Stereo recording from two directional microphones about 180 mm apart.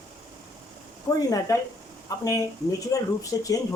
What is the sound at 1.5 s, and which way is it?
Speech, 20° left (ahead or behind).